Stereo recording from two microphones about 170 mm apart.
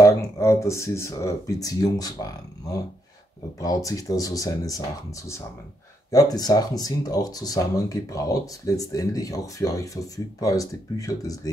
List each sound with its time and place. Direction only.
0.0 s speech: 20° left (ahead or behind)
6.0 s speech: 20° left (ahead or behind)